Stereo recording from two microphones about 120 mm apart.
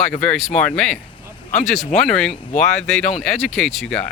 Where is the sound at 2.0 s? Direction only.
5° left (ahead or behind).